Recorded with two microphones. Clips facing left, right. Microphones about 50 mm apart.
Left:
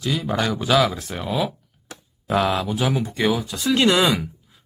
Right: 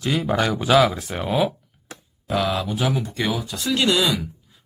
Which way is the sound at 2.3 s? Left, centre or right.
Centre.